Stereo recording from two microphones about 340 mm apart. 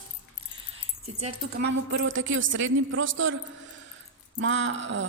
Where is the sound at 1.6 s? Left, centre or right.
Right.